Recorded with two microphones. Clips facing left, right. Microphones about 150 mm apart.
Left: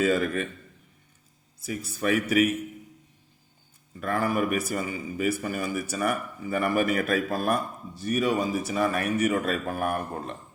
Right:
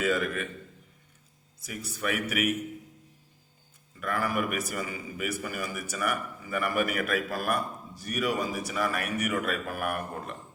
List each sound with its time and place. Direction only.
0.0 s a man's voice: 35° left (ahead or behind)
1.6 s a man's voice: 30° left (ahead or behind)
4.0 s a man's voice: 30° left (ahead or behind)